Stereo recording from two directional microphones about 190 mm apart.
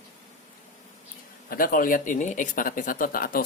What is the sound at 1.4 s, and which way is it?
Speech, 50° left (ahead or behind).